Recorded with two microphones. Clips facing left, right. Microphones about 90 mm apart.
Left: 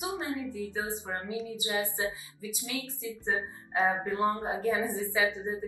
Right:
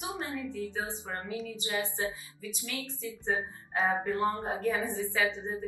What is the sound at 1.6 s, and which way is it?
A woman's voice, 15° left (ahead or behind).